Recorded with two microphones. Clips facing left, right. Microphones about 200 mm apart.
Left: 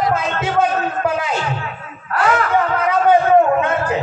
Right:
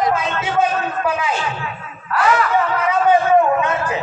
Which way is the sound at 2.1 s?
50° left (ahead or behind).